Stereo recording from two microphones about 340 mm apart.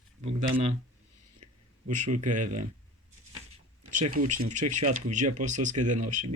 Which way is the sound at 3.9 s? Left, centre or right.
Right.